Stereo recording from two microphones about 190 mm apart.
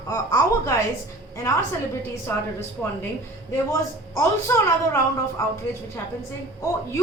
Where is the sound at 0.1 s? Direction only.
20° left (ahead or behind).